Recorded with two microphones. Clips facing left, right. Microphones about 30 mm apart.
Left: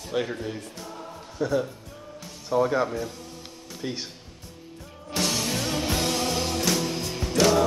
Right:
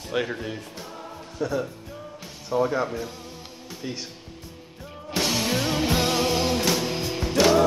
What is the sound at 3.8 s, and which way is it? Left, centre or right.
Speech, centre.